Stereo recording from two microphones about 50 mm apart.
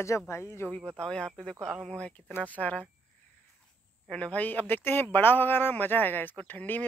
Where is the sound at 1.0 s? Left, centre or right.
Centre.